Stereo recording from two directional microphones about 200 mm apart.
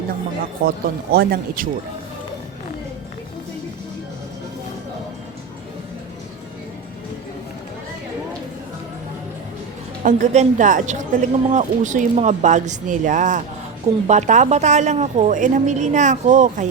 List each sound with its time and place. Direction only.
0.6 s speech: 50° right (ahead or behind)
10.0 s speech: 40° right (ahead or behind)